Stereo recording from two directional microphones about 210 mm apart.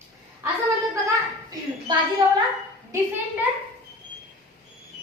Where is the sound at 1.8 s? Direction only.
20° right (ahead or behind).